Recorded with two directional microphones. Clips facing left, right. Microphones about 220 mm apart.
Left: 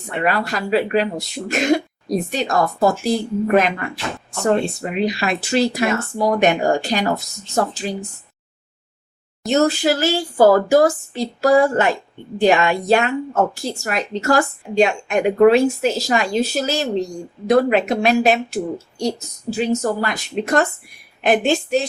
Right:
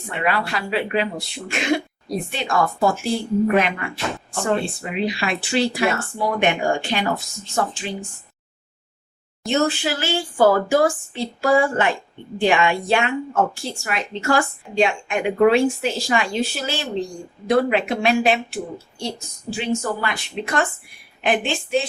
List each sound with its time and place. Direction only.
0.3 s speech: 40° left (ahead or behind)
9.4 s a woman's voice: 40° left (ahead or behind)